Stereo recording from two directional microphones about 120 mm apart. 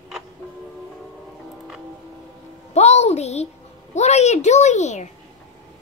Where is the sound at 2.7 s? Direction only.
65° left (ahead or behind).